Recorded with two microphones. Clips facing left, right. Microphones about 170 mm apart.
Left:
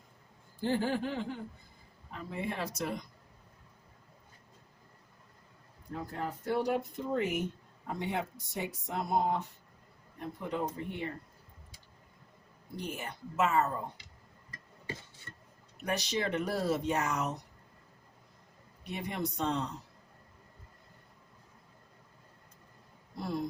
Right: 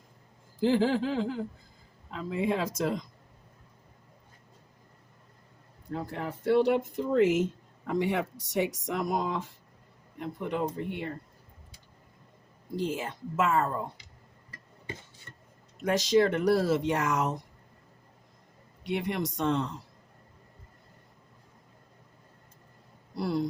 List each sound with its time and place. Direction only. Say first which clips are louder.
0.6 s speech: right 6 dB; 90° right
5.9 s speech: right 3 dB; 75° right (ahead or behind)
12.7 s speech: right 8 dB; 90° right
15.8 s speech: right 10 dB; 90° right
18.8 s speech: right 6 dB; 90° right
23.1 s speech: right 6 dB; 90° right